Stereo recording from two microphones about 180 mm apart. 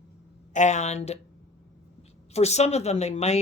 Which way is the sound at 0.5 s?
40° left (ahead or behind).